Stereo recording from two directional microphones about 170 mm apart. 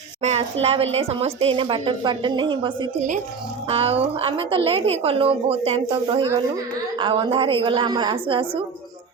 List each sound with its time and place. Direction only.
0.2 s a woman's voice: 40° right (ahead or behind)